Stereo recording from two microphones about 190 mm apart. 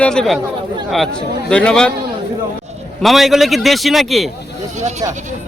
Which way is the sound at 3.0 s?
Centre (ahead or behind).